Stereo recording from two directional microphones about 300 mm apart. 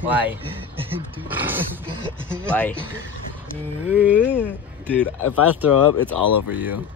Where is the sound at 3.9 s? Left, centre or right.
Centre.